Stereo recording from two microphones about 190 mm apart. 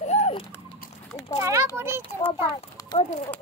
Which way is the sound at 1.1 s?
15° left (ahead or behind).